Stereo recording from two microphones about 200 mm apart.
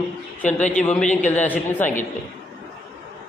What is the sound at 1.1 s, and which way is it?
Speech, 35° left (ahead or behind).